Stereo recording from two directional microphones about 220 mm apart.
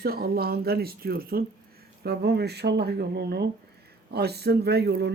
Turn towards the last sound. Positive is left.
turn(degrees=-45)  # may be behind; listen again after turning